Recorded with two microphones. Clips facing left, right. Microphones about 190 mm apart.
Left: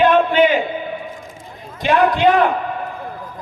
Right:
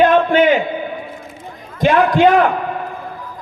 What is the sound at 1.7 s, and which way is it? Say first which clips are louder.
Speech: right 3 dB; 50° right (ahead or behind).